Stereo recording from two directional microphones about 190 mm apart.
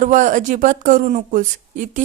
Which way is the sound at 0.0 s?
40° right (ahead or behind).